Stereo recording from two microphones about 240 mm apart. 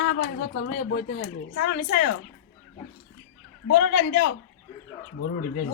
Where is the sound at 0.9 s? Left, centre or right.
Left.